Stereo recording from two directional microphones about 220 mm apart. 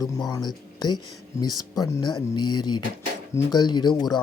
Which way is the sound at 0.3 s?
20° left (ahead or behind).